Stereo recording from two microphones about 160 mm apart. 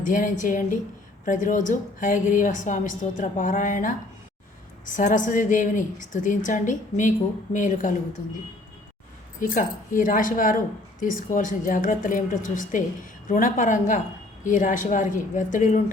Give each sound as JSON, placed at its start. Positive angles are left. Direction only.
{"t": 0.0, "sound": "a woman's voice", "side_deg": 55}
{"t": 4.9, "sound": "a woman's voice", "side_deg": 55}
{"t": 9.4, "sound": "a woman's voice", "side_deg": 55}